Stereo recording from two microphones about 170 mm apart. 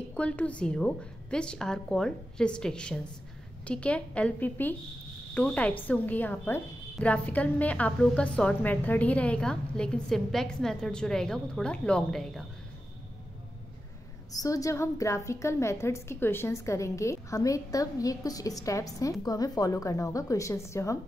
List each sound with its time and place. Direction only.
0.1 s a woman's voice: 10° left (ahead or behind)
14.3 s a woman's voice: 20° left (ahead or behind)